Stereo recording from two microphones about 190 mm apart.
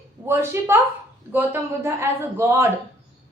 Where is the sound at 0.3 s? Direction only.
10° right (ahead or behind).